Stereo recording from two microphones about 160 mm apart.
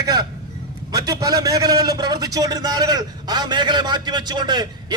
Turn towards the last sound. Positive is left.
turn(degrees=-25)  # may be behind; listen again after turning